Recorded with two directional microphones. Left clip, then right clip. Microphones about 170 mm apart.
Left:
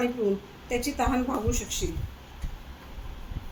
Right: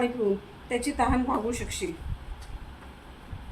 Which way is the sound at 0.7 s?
5° right (ahead or behind).